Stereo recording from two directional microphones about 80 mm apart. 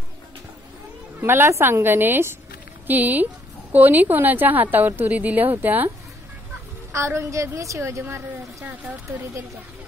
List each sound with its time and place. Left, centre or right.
1.2 s a woman's voice: right
6.9 s a woman's voice: right